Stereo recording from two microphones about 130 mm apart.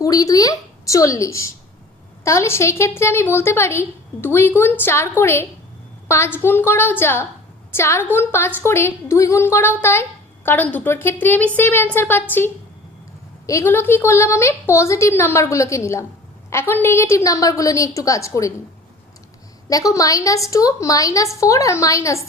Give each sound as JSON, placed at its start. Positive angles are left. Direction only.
{"t": 0.0, "sound": "a woman's voice", "side_deg": 25}
{"t": 13.5, "sound": "a woman's voice", "side_deg": 20}
{"t": 19.6, "sound": "a woman's voice", "side_deg": 25}